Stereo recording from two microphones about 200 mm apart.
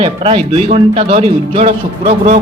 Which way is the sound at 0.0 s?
30° right (ahead or behind).